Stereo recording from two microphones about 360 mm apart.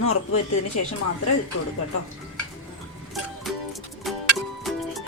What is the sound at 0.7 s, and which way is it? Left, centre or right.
Speech, left.